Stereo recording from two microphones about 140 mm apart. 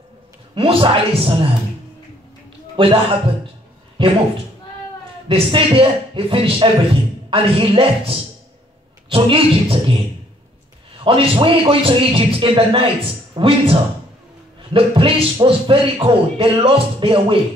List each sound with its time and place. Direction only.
0.6 s speech: 40° right (ahead or behind)
2.7 s a man's voice: 40° right (ahead or behind)
4.0 s speech: 35° right (ahead or behind)
5.3 s speech: 40° right (ahead or behind)
11.1 s speech: 40° right (ahead or behind)